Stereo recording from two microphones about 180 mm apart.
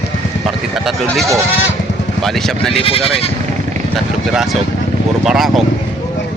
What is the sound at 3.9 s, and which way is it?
Speech, centre (ahead or behind).